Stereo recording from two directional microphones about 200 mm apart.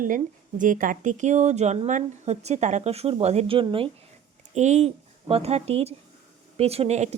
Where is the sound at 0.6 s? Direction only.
40° right (ahead or behind).